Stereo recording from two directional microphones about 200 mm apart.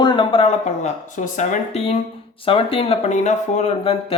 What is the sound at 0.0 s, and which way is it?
Speech, 25° left (ahead or behind).